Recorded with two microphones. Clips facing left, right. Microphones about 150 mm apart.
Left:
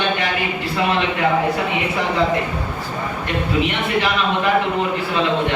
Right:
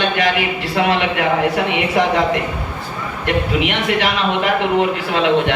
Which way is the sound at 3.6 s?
85° right.